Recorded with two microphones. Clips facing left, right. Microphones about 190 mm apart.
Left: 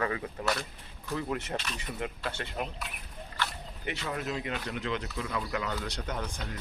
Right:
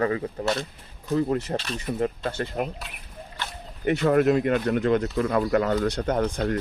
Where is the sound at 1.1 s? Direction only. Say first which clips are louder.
Right 9 dB; 35° right (ahead or behind).